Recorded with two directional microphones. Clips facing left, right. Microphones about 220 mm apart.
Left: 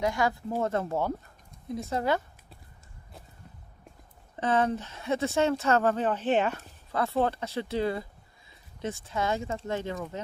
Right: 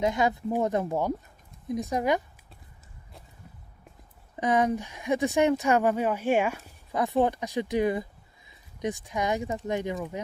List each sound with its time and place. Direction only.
0.0 s speech: 20° right (ahead or behind)
4.4 s speech: 15° right (ahead or behind)